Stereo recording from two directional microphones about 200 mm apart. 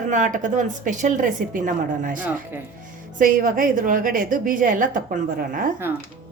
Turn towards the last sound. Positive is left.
turn(degrees=-10)  # may be behind; listen again after turning